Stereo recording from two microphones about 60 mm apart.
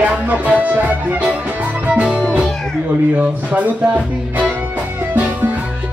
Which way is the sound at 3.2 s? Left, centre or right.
Right.